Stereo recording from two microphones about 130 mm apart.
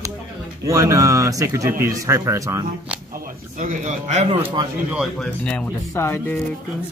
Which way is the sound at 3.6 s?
80° right.